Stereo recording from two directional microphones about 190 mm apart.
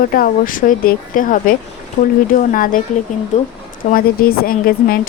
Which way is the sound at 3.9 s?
50° left (ahead or behind).